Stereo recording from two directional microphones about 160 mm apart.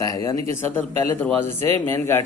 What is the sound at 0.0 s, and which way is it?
Speech, 20° left (ahead or behind).